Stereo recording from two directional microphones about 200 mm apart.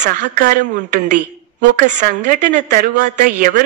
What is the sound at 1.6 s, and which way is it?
A woman's voice, 40° right (ahead or behind).